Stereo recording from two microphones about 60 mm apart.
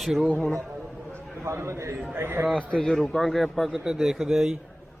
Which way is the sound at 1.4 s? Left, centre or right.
Right.